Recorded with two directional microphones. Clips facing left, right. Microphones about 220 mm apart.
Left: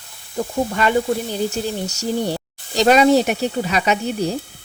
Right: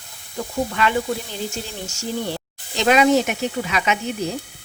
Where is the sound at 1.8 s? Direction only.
40° left (ahead or behind).